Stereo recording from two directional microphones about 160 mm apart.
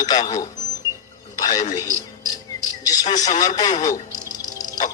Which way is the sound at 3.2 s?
25° left (ahead or behind).